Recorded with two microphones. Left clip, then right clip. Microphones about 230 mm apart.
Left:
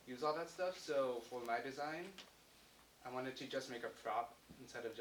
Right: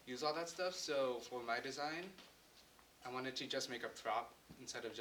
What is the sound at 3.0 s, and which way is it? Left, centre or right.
Speech, right.